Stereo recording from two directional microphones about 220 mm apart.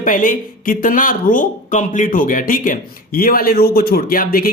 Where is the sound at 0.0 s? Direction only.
40° left (ahead or behind).